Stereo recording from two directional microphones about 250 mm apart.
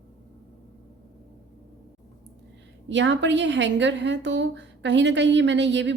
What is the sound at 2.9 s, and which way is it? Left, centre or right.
A woman's voice, right.